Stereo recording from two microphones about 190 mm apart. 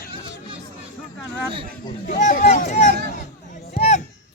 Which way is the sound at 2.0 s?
45° left (ahead or behind).